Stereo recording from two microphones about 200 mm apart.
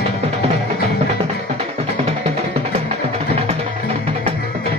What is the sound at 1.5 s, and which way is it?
Music, 30° right (ahead or behind).